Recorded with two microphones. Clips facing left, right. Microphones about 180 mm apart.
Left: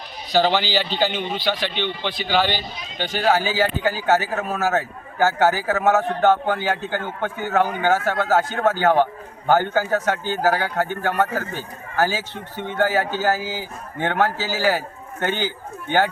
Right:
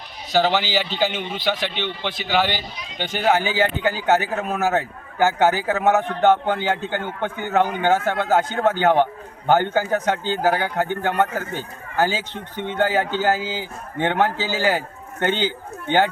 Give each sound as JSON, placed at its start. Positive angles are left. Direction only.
{"t": 0.4, "sound": "a man's voice", "side_deg": -20}